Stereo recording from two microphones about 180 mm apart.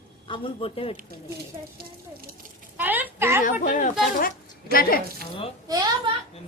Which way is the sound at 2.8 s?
10° right (ahead or behind).